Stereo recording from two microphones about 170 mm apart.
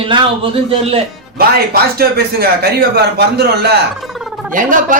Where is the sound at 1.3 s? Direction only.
65° right (ahead or behind).